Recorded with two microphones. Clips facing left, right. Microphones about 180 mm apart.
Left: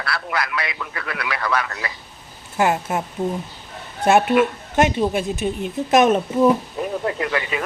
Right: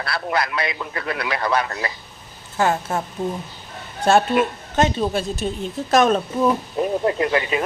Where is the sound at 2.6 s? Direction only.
20° left (ahead or behind).